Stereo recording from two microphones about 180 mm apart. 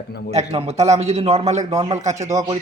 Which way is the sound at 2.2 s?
20° right (ahead or behind).